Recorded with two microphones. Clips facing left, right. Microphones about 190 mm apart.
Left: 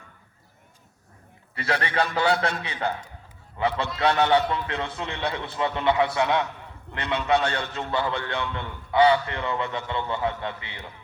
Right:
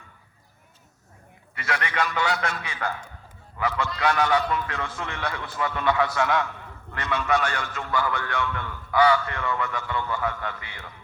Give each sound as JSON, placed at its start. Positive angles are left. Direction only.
{"t": 1.5, "sound": "a man's voice", "side_deg": 30}
{"t": 2.7, "sound": "a man's voice", "side_deg": 20}